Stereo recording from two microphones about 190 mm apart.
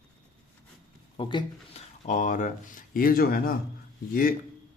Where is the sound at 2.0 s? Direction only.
45° left (ahead or behind).